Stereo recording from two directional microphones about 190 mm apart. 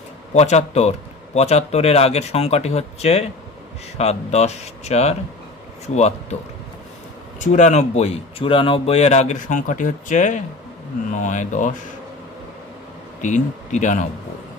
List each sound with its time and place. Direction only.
0.3 s speech: 35° left (ahead or behind)
7.3 s speech: 40° left (ahead or behind)
13.2 s speech: 40° left (ahead or behind)